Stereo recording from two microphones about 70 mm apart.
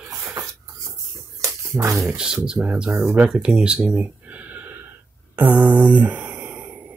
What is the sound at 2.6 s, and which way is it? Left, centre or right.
Speech, centre.